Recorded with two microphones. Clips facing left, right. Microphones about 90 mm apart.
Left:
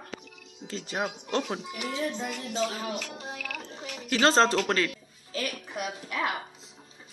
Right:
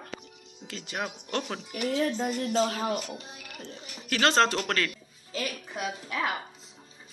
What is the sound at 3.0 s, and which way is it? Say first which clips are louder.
Speech: left 2 dB; 90° left.